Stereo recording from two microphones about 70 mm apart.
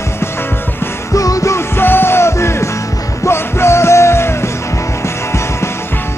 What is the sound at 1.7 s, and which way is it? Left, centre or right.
Music, left.